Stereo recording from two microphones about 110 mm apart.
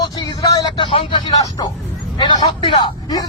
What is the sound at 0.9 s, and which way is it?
A man's voice, 50° left (ahead or behind).